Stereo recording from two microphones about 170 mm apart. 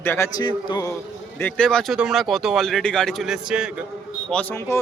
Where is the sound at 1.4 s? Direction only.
10° left (ahead or behind).